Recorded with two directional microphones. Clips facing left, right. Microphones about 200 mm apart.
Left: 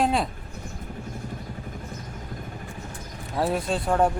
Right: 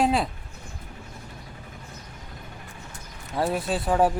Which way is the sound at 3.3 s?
Centre (ahead or behind).